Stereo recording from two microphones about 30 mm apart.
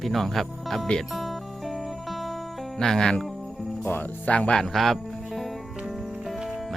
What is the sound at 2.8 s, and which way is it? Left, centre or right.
Speech, centre.